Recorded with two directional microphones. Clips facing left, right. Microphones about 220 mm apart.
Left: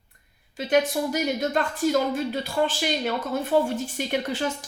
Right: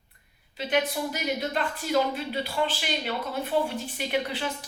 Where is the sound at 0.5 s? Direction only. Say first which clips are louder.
Left 5 dB; 45° left (ahead or behind).